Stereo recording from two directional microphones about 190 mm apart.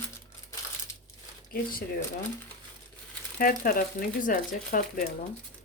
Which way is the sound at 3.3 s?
50° left (ahead or behind).